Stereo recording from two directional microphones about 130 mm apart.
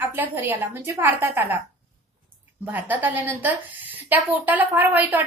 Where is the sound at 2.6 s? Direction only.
15° right (ahead or behind).